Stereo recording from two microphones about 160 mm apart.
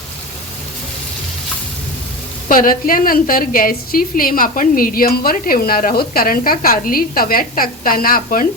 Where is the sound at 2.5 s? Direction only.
60° left (ahead or behind).